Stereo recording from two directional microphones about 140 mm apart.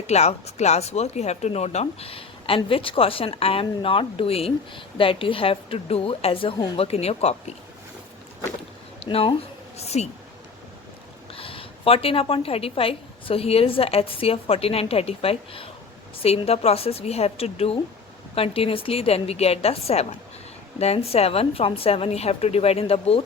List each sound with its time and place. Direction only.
0.1 s speech: 50° left (ahead or behind)
9.0 s speech: 40° left (ahead or behind)
11.3 s speech: 40° left (ahead or behind)